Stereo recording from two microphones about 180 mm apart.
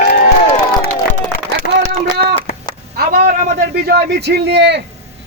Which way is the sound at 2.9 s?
50° right (ahead or behind).